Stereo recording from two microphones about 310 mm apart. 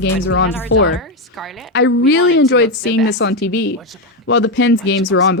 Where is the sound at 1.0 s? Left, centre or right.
Centre.